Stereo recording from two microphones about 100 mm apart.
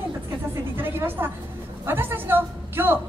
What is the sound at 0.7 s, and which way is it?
A woman's voice, 20° right (ahead or behind).